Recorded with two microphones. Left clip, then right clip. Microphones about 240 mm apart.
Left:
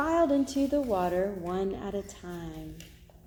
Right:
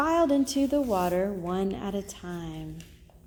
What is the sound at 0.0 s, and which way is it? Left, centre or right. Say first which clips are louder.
A woman's voice: right 2 dB; right.